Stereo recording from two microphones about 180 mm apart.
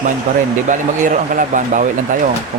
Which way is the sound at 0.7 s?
45° right (ahead or behind).